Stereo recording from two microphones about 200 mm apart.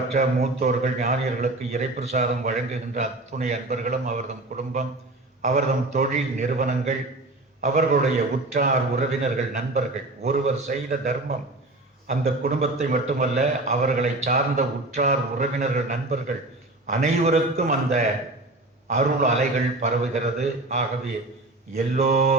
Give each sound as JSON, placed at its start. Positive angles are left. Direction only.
{"t": 0.1, "sound": "a man's voice", "side_deg": -35}